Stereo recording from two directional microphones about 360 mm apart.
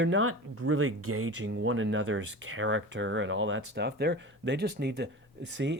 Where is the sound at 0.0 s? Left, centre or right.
Right.